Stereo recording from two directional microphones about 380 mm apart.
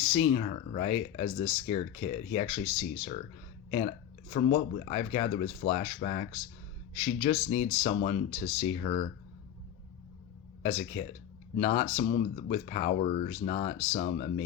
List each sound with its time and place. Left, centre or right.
0.0 s speech: centre
3.7 s speech: centre
10.6 s speech: centre